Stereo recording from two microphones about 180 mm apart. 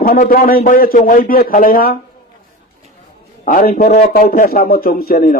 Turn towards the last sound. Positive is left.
turn(degrees=55)  # may be behind; listen again after turning